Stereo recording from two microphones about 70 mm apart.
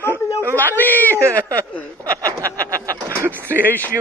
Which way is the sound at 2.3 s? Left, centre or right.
Right.